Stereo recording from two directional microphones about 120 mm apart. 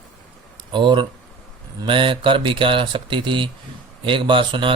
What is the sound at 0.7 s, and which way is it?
Speech, 40° right (ahead or behind).